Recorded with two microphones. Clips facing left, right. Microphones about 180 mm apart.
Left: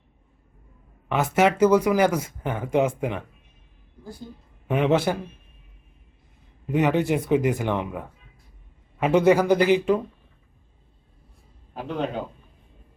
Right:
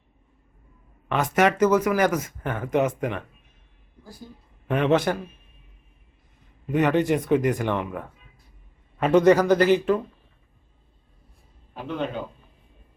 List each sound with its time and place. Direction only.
1.0 s speech: 10° left (ahead or behind)
4.7 s speech: 10° left (ahead or behind)
6.7 s speech: 10° left (ahead or behind)